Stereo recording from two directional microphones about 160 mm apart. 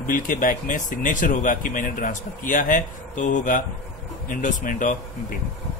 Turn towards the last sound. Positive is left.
turn(degrees=55)  # may be behind; listen again after turning